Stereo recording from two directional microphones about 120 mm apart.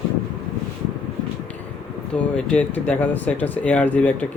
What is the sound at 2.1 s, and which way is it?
Speech, 10° left (ahead or behind).